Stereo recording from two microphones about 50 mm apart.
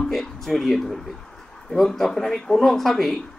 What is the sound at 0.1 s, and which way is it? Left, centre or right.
Speech, centre.